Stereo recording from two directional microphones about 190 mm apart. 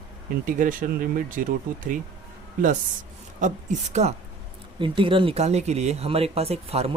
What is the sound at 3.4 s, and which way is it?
Speech, 40° right (ahead or behind).